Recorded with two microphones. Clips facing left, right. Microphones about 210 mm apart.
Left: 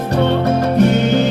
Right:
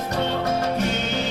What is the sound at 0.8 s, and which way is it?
Music, 60° left (ahead or behind).